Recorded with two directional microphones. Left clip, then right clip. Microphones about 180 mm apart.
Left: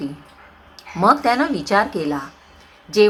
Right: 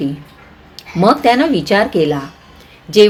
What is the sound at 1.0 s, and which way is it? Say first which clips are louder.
Speech: right 4 dB; 30° right (ahead or behind).